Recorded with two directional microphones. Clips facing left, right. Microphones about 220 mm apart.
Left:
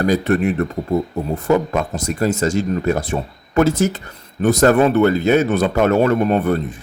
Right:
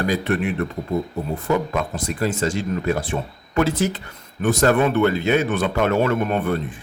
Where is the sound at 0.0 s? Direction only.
40° left (ahead or behind).